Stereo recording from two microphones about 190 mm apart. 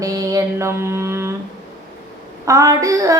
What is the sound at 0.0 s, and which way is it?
Mantra, 20° right (ahead or behind).